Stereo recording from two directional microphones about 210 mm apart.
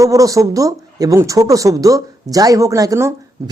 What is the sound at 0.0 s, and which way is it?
Speech, 15° right (ahead or behind).